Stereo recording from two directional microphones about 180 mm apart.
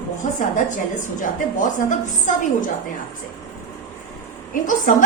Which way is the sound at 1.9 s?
45° left (ahead or behind).